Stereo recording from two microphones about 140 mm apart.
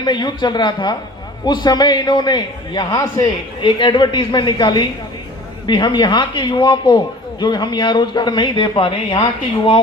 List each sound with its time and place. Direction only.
0.0 s a man's voice: 30° left (ahead or behind)